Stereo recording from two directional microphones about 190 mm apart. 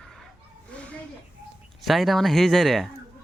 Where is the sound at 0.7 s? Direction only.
5° left (ahead or behind).